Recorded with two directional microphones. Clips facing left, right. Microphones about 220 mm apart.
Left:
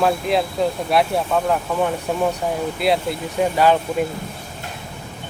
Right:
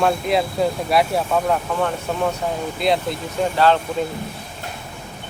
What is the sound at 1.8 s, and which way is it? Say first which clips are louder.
Speech: left 1 dB; 10° left (ahead or behind).